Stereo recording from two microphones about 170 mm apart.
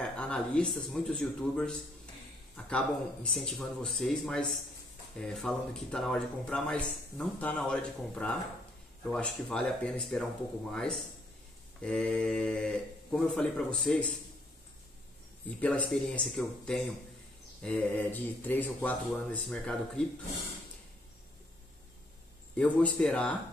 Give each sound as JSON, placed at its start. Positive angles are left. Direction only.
{"t": 0.0, "sound": "speech", "side_deg": 5}
{"t": 15.6, "sound": "speech", "side_deg": 5}
{"t": 22.6, "sound": "speech", "side_deg": 5}